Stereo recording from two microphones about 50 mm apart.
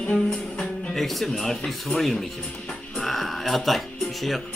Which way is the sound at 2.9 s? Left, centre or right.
Centre.